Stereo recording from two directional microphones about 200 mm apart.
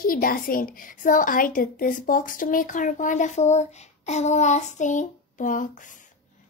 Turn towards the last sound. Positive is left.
turn(degrees=40)  # may be behind; listen again after turning